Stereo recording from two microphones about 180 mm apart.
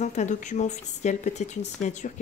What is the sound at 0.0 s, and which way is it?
Speech, 40° left (ahead or behind).